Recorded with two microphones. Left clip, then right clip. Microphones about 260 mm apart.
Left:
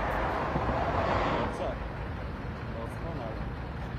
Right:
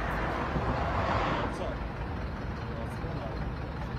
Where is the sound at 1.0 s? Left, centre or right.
Left.